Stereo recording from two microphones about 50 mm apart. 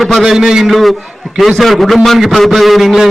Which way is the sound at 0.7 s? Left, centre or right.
Centre.